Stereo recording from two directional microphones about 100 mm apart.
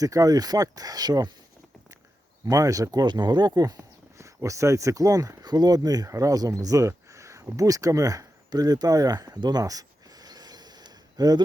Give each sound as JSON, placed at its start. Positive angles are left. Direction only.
{"t": 0.0, "sound": "speech", "side_deg": -35}
{"t": 2.5, "sound": "speech", "side_deg": -35}